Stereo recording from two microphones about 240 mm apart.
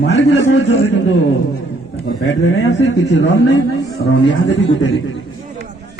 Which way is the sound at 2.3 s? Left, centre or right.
Left.